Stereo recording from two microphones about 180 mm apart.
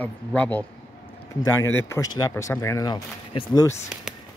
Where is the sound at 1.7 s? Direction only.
15° left (ahead or behind).